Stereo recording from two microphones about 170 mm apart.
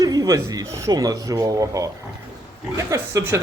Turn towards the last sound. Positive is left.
turn(degrees=-15)  # may be behind; listen again after turning